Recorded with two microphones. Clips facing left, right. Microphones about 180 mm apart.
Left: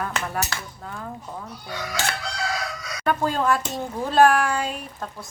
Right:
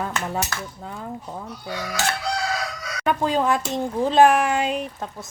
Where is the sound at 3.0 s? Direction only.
15° right (ahead or behind).